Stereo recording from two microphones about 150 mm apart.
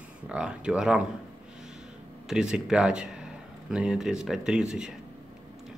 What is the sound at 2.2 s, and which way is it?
Speech, 5° right (ahead or behind).